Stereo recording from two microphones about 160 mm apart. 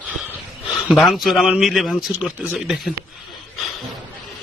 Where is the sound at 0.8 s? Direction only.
Centre (ahead or behind).